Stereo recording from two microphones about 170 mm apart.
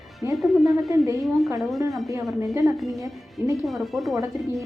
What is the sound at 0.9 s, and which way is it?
Speech, 20° right (ahead or behind).